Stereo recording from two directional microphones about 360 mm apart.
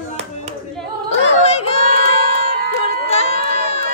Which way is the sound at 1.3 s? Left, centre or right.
Centre.